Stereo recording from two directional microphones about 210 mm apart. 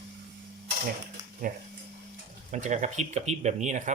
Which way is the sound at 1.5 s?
40° right (ahead or behind).